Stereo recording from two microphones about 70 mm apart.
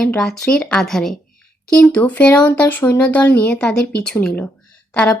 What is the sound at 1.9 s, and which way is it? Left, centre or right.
A woman's voice, centre.